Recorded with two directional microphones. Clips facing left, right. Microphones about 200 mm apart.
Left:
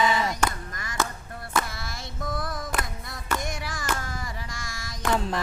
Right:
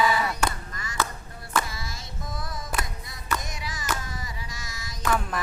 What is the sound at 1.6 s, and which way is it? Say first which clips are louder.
Music: even; 60° left (ahead or behind).